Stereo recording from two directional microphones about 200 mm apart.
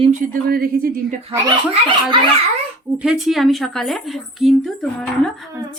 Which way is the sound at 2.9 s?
5° right (ahead or behind).